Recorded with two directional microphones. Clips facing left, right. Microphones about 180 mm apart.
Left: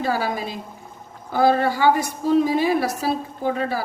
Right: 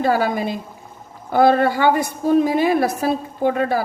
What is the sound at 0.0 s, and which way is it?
A woman's voice, 55° right (ahead or behind).